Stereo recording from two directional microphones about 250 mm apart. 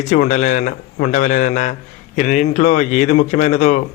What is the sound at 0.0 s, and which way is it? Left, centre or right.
A man's voice, left.